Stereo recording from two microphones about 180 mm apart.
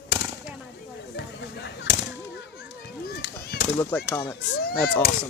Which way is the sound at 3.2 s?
65° left (ahead or behind).